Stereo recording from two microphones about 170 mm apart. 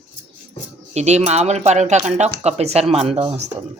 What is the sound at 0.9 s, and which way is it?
Speech, 40° right (ahead or behind).